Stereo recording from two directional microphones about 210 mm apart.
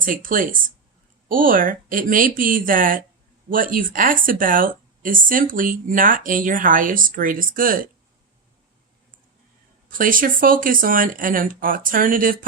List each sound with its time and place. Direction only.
0.0 s speech: 40° right (ahead or behind)
9.9 s speech: 40° right (ahead or behind)